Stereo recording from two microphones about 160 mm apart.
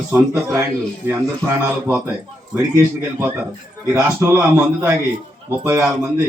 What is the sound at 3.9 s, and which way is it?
Speech, 15° right (ahead or behind).